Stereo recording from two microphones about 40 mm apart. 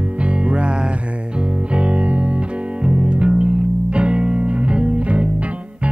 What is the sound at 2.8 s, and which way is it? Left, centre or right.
Music, right.